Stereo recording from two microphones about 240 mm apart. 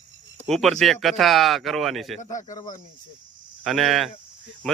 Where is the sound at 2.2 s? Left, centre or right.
Left.